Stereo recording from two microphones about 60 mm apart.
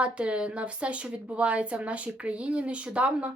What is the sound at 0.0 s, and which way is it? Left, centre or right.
A woman's voice, centre.